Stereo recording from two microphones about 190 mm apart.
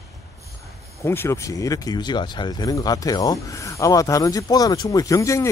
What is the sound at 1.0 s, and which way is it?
Speech, 10° left (ahead or behind).